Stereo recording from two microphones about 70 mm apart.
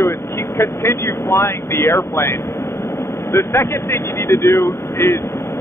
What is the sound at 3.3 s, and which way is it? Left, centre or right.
Speech, left.